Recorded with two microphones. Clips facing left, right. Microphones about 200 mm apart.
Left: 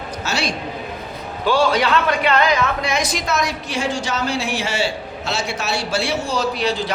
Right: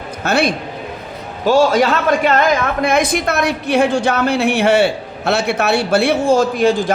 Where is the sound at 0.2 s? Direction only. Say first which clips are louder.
Right 9 dB; 55° right (ahead or behind).